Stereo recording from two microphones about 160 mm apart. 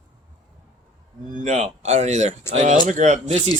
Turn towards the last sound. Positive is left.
turn(degrees=-50)  # may be behind; listen again after turning